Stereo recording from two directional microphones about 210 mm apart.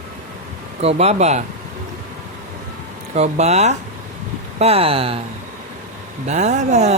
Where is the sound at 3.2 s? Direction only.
30° right (ahead or behind).